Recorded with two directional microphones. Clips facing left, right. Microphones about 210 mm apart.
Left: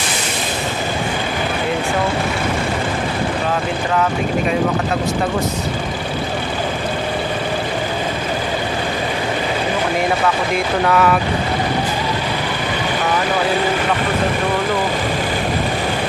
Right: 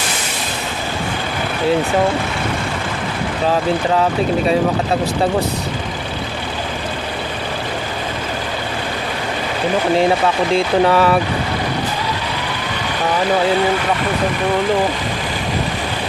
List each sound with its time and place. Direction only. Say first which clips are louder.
10.5 s speech: right 6 dB; 30° right (ahead or behind)